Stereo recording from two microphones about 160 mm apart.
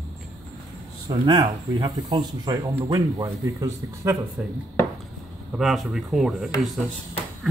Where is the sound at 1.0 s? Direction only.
25° right (ahead or behind).